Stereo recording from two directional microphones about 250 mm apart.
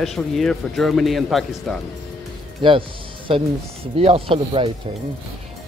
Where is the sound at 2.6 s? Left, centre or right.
Centre.